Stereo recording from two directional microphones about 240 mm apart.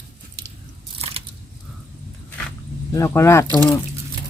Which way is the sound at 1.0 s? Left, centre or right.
Right.